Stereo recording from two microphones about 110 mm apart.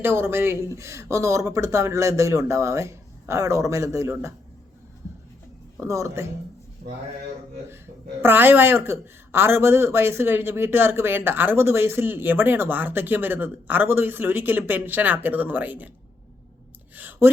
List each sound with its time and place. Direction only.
0.0 s speech: 20° right (ahead or behind)
5.7 s speech: 25° right (ahead or behind)
8.2 s speech: 20° right (ahead or behind)
16.9 s a sound: 15° right (ahead or behind)